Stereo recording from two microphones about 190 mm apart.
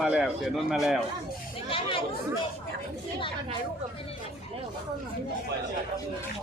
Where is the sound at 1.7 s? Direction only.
25° left (ahead or behind).